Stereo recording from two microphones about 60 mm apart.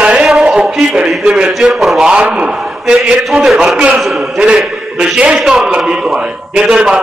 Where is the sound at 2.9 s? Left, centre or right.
Centre.